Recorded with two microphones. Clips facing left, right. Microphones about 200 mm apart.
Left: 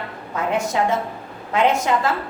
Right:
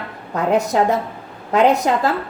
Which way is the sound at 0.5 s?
40° right (ahead or behind).